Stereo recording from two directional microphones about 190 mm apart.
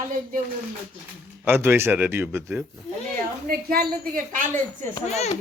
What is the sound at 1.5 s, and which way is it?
Speech, 10° right (ahead or behind).